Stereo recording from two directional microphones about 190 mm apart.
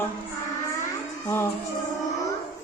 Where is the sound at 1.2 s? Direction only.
15° left (ahead or behind).